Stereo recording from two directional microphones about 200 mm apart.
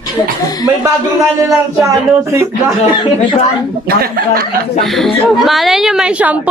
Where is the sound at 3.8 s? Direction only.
50° right (ahead or behind).